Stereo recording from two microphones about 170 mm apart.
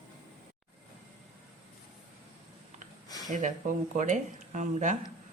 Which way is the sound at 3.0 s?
20° left (ahead or behind).